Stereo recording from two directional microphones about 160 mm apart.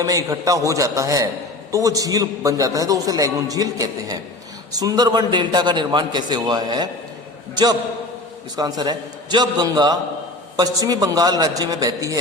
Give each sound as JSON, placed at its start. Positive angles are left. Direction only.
{"t": 0.0, "sound": "a man's voice", "side_deg": -20}